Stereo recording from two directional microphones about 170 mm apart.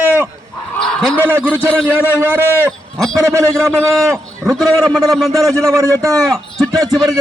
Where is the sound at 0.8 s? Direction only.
5° left (ahead or behind).